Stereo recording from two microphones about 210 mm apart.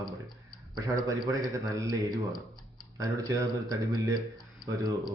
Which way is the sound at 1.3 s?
15° right (ahead or behind).